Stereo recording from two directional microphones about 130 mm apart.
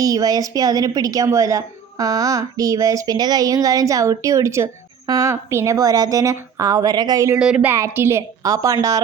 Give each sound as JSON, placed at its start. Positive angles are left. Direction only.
{"t": 0.0, "sound": "a woman's voice", "side_deg": -30}
{"t": 7.3, "sound": "speech", "side_deg": -5}
{"t": 7.7, "sound": "a woman's voice", "side_deg": -20}